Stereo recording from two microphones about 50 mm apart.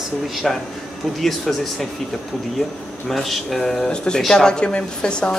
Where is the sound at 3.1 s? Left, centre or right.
Centre.